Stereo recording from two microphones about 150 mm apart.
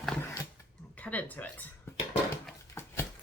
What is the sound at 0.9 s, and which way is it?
Speech, 10° left (ahead or behind).